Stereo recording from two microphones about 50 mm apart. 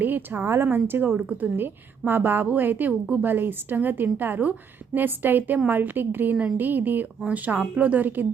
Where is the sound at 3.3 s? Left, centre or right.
Right.